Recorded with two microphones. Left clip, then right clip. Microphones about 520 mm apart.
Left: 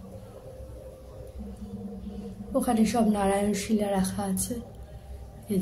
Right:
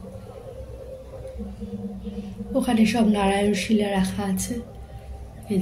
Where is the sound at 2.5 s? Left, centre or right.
Left.